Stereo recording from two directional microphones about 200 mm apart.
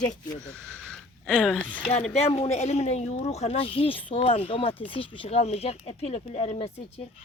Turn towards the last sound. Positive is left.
turn(degrees=30)  # may be behind; listen again after turning